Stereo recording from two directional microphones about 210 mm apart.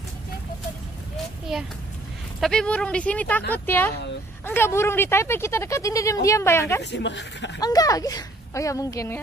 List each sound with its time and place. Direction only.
1.1 s a sound: centre (ahead or behind)
2.4 s speech: 5° left (ahead or behind)
6.8 s speech: 55° left (ahead or behind)
7.6 s speech: 15° left (ahead or behind)